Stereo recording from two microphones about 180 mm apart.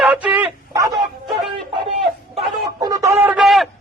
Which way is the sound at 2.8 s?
20° right (ahead or behind).